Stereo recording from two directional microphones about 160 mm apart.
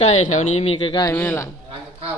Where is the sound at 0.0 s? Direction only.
45° left (ahead or behind).